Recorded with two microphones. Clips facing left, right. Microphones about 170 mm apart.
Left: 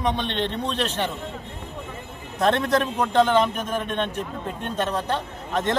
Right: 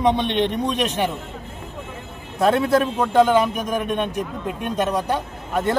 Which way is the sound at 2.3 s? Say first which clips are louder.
Right 3 dB; 10° right (ahead or behind).